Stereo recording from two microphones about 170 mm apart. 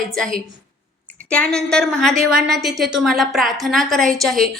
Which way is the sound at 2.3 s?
70° right (ahead or behind).